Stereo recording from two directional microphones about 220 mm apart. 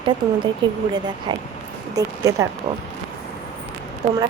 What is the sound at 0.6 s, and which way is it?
Speech, 20° right (ahead or behind).